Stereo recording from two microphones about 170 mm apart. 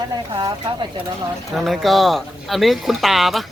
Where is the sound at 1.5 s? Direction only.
Centre (ahead or behind).